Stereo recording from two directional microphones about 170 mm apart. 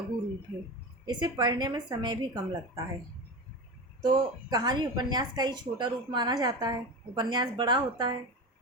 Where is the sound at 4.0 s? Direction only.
25° right (ahead or behind).